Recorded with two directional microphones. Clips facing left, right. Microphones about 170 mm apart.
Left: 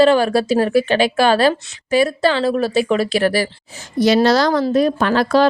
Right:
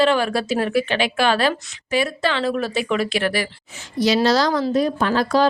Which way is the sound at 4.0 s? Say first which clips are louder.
Left 4 dB; 55° left (ahead or behind).